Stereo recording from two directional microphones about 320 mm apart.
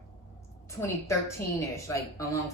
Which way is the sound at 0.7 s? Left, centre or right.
Centre.